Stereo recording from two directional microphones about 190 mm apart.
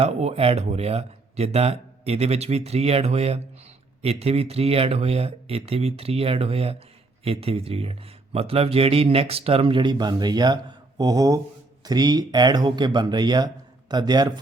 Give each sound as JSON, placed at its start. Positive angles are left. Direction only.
{"t": 0.0, "sound": "speech", "side_deg": -35}